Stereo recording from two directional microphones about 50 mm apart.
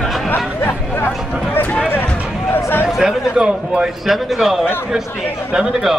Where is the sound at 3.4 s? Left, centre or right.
Right.